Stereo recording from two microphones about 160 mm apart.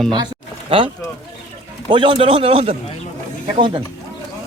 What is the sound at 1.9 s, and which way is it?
Speech, 30° right (ahead or behind).